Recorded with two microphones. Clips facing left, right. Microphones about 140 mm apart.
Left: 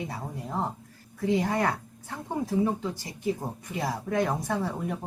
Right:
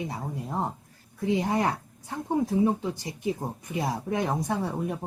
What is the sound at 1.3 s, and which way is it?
Speech, 20° right (ahead or behind).